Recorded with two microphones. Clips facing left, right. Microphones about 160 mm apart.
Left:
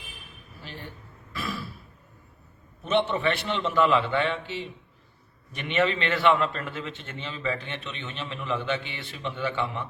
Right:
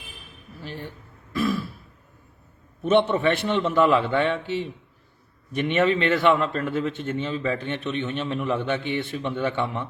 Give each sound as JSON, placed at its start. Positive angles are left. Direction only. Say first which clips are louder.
{"t": 1.4, "sound": "throat clearing", "louder": "right 10 dB", "side_deg": -45}
{"t": 2.9, "sound": "a man's voice", "louder": "right 5 dB", "side_deg": -50}